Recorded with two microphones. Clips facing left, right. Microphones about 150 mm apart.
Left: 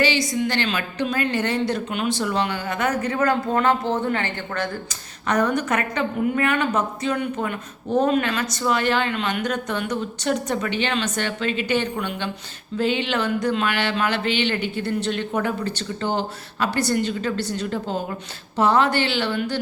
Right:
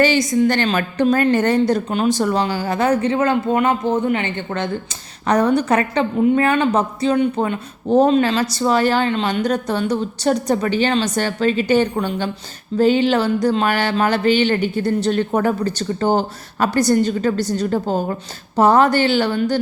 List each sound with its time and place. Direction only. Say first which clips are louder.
0.0 s a woman's voice: right 6 dB; 45° right (ahead or behind); by 4.7 s 20° right (ahead or behind)
5.3 s a woman's voice: right 6 dB; 30° right (ahead or behind)